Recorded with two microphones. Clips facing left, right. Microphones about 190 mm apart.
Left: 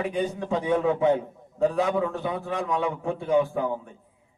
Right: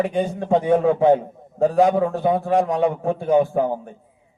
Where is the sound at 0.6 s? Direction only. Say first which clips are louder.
Right 5 dB; 50° right (ahead or behind).